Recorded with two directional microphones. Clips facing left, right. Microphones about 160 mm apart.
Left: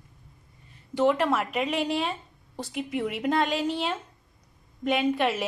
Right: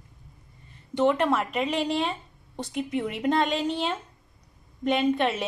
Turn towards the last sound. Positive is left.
turn(degrees=5)  # may be behind; listen again after turning